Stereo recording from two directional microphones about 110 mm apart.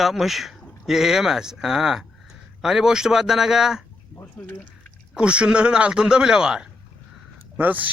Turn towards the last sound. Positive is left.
turn(degrees=-15)  # may be behind; listen again after turning